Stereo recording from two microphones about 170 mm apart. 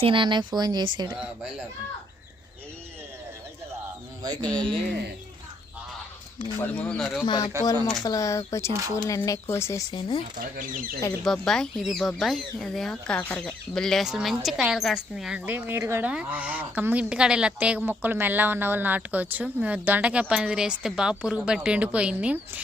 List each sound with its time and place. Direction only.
0.0 s speech: 30° right (ahead or behind)
1.1 s speech: 5° right (ahead or behind)
4.4 s speech: 5° left (ahead or behind)
6.6 s speech: 10° left (ahead or behind)
7.6 s speech: 20° right (ahead or behind)
8.0 s speech: 20° left (ahead or behind)
9.9 s speech: 30° left (ahead or behind)
10.3 s speech: 55° right (ahead or behind)
11.2 s speech: centre (ahead or behind)